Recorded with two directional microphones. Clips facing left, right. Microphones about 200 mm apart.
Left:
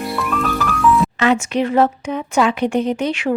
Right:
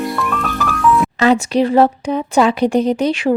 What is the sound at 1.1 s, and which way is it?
Speech, 35° right (ahead or behind).